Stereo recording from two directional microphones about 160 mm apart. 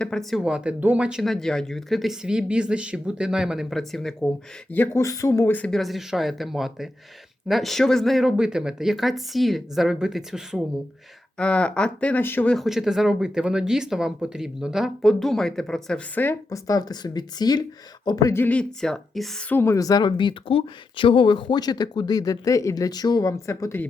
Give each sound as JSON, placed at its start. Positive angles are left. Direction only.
{"t": 0.0, "sound": "speech", "side_deg": 5}
{"t": 4.7, "sound": "a woman's voice", "side_deg": 15}